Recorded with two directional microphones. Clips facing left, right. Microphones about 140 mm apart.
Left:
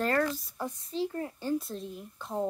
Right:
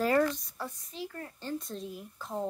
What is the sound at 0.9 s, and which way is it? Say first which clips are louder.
Speech: left 8 dB; 25° left (ahead or behind).